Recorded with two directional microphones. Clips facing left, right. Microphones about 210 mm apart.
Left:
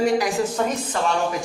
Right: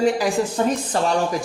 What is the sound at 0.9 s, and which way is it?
Speech, 35° right (ahead or behind).